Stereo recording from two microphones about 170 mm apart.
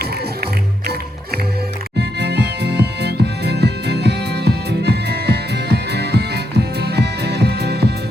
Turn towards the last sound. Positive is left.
turn(degrees=-75)  # may be behind; listen again after turning